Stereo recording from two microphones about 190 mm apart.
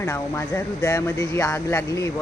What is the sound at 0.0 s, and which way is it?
Speech, 15° left (ahead or behind).